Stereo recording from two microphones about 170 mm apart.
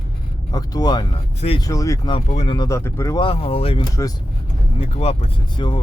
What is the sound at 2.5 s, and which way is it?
Speech, 20° left (ahead or behind).